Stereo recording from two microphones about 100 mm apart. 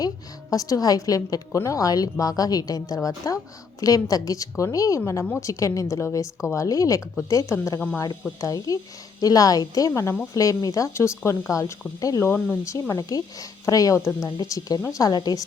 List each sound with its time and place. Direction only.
0.5 s speech: 35° left (ahead or behind)
12.2 s speech: 25° left (ahead or behind); by 15.4 s 40° left (ahead or behind)